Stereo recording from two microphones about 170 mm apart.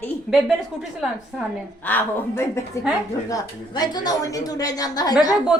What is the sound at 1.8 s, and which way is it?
A woman's voice, 10° left (ahead or behind).